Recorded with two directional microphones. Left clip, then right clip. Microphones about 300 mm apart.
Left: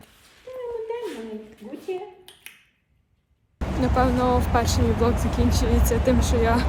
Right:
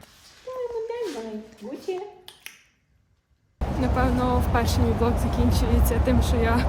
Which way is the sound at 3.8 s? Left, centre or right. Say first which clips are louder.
Left 3 dB; centre.